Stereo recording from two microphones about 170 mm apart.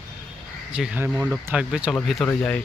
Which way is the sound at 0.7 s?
5° right (ahead or behind).